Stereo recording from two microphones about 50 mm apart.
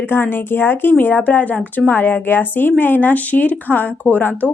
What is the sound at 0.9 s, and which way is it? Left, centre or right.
A woman's voice, left.